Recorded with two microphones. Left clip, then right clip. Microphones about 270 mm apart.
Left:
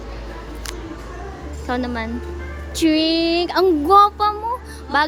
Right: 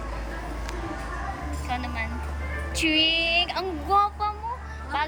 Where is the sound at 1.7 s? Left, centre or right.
Centre.